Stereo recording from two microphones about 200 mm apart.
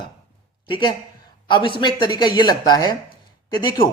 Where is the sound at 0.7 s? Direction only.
25° left (ahead or behind).